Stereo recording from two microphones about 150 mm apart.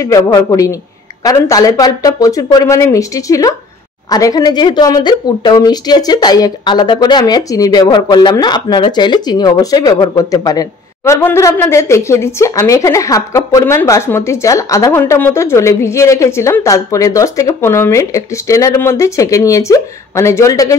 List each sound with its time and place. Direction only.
0.0 s a woman's voice: 20° left (ahead or behind)